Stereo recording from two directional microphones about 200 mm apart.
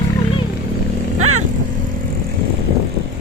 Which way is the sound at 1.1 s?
90° right.